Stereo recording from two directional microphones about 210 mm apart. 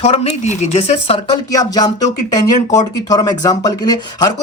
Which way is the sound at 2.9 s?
20° left (ahead or behind).